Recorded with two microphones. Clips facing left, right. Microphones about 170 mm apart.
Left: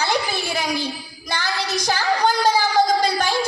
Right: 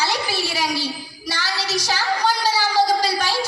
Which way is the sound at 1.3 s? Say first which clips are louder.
Left 1 dB; 55° left (ahead or behind).